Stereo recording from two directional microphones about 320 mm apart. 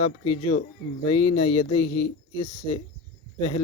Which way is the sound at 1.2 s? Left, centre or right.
Left.